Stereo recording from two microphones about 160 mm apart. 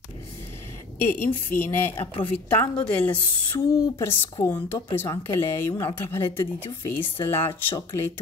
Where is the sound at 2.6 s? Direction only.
10° left (ahead or behind).